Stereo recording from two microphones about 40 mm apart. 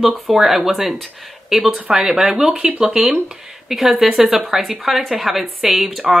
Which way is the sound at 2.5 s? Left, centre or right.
Right.